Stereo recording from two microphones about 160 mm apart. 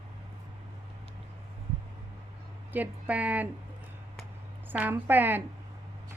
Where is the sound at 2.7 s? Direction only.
10° right (ahead or behind).